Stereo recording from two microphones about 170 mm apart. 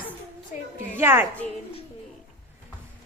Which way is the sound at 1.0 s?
15° right (ahead or behind).